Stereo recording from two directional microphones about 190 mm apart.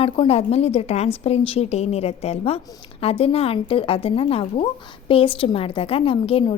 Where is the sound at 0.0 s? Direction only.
30° left (ahead or behind).